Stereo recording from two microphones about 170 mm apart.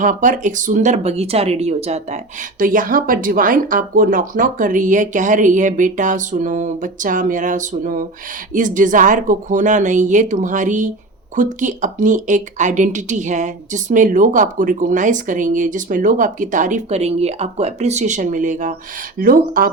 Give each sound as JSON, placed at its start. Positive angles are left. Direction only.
{"t": 0.0, "sound": "speech", "side_deg": -50}